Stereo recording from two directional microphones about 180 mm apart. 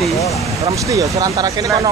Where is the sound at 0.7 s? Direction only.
20° right (ahead or behind).